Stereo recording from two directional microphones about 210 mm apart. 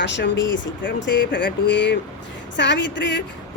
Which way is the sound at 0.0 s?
55° left (ahead or behind).